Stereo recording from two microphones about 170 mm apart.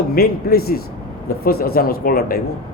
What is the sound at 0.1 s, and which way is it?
A man's voice, 60° left (ahead or behind).